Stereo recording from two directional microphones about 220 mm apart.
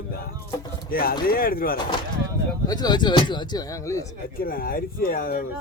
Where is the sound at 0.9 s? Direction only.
40° left (ahead or behind).